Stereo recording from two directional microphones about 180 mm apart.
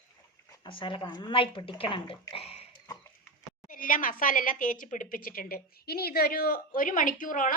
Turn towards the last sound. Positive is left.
turn(degrees=50)  # may be behind; listen again after turning